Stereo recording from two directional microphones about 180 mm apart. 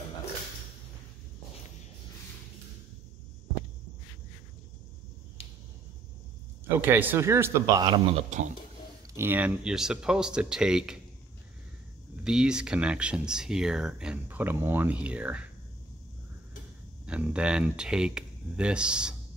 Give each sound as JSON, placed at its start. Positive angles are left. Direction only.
{"t": 6.9, "sound": "a man's voice", "side_deg": -10}
{"t": 8.3, "sound": "speech", "side_deg": -40}
{"t": 9.1, "sound": "speech", "side_deg": -10}
{"t": 12.2, "sound": "speech", "side_deg": -5}
{"t": 17.0, "sound": "speech", "side_deg": -5}